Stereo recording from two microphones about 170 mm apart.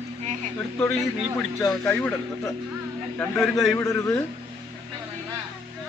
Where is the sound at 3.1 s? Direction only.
10° left (ahead or behind).